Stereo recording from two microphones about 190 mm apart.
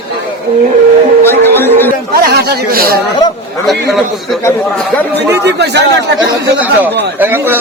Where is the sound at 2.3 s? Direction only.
55° right (ahead or behind).